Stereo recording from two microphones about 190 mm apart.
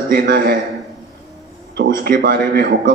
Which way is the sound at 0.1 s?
50° right (ahead or behind).